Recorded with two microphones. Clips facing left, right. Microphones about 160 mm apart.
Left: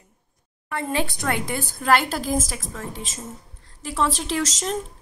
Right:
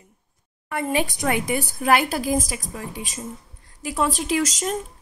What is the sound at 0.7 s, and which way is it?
A woman's voice, 15° right (ahead or behind).